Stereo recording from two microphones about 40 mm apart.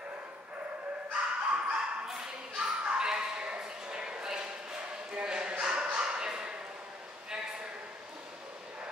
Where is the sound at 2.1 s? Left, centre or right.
Centre.